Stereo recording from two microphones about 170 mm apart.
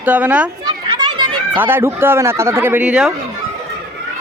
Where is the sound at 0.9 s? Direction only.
25° right (ahead or behind).